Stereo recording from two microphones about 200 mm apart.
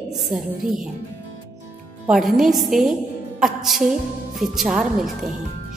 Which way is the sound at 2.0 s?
Centre (ahead or behind).